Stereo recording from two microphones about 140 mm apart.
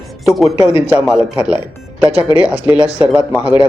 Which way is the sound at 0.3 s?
Centre (ahead or behind).